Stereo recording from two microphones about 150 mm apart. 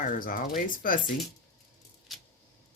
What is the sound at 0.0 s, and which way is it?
Speech, 65° left (ahead or behind).